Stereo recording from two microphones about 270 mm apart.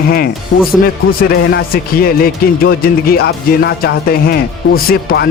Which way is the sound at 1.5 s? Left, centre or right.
Left.